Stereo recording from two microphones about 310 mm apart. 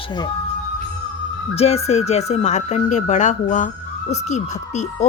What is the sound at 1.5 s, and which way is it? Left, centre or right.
Speech, centre.